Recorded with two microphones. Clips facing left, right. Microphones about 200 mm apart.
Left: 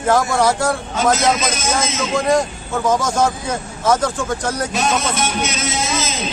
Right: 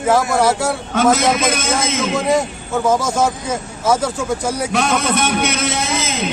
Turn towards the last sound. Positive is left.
turn(degrees=-60)  # may be behind; listen again after turning